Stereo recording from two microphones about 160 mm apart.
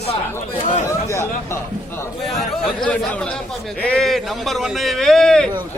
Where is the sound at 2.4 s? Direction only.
5° left (ahead or behind).